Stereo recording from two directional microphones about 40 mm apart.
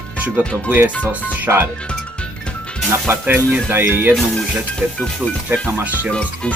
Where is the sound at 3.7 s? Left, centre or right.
Right.